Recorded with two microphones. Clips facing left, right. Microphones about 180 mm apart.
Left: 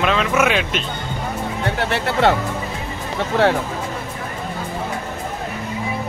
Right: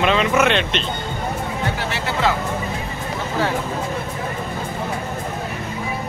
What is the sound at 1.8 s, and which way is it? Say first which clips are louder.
Speech: left 8 dB; 60° left (ahead or behind).